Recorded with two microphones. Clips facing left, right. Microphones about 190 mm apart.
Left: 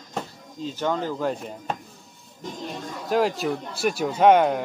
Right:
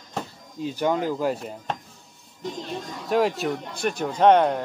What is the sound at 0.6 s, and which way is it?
Speech, 15° right (ahead or behind).